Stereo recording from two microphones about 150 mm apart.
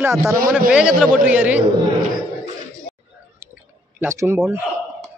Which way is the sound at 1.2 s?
10° right (ahead or behind).